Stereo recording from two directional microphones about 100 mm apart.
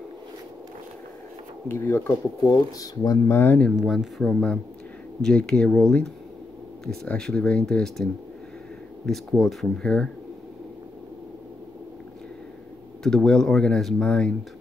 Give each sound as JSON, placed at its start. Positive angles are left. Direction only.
{"t": 1.7, "sound": "speech", "side_deg": 25}
{"t": 2.4, "sound": "speech", "side_deg": 40}
{"t": 3.3, "sound": "speech", "side_deg": 20}
{"t": 3.7, "sound": "speech", "side_deg": -5}
{"t": 7.1, "sound": "speech", "side_deg": 5}
{"t": 13.0, "sound": "speech", "side_deg": 5}